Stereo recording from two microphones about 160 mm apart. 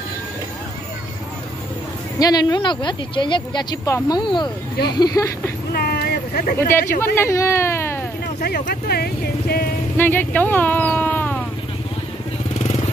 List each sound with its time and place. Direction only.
2.1 s speech: 25° left (ahead or behind)
5.7 s a sound: 75° left (ahead or behind)
7.2 s speech: 15° left (ahead or behind)
8.4 s speech: 70° left (ahead or behind)
9.9 s speech: 10° left (ahead or behind)